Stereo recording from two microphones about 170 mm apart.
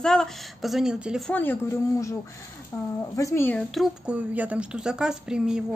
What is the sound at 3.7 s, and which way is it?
Speech, 5° right (ahead or behind).